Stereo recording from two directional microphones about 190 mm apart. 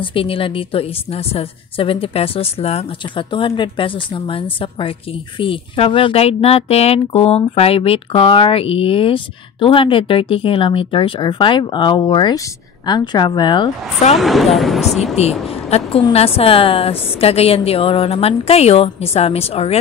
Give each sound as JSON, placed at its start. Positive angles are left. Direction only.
{"t": 0.0, "sound": "speech", "side_deg": 30}
{"t": 14.1, "sound": "speech", "side_deg": 0}
{"t": 15.2, "sound": "a woman's voice", "side_deg": 35}